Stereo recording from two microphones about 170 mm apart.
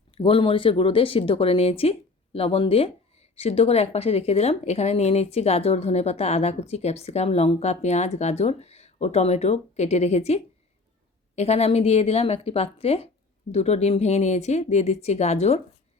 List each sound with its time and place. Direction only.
0.1 s speech: 30° left (ahead or behind)